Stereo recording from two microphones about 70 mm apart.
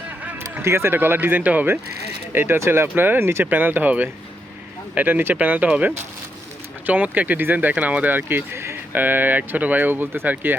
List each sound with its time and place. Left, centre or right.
0.2 s a sound: right
0.6 s speech: right
0.9 s speech: right